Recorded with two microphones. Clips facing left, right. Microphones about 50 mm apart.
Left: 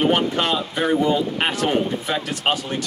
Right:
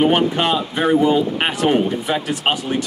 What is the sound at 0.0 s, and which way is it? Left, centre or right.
Speech, centre.